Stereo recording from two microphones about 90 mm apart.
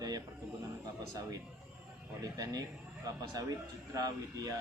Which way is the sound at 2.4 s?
45° right (ahead or behind).